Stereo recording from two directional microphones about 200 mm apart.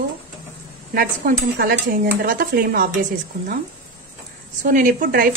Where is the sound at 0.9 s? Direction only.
50° right (ahead or behind).